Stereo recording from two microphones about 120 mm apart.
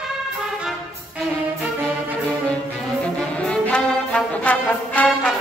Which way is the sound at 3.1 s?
10° left (ahead or behind).